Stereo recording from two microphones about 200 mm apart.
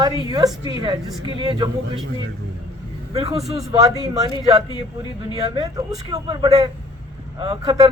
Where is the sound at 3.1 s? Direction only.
30° right (ahead or behind).